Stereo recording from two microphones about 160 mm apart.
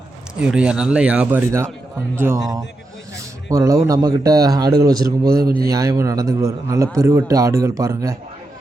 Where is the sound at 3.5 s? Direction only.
20° right (ahead or behind).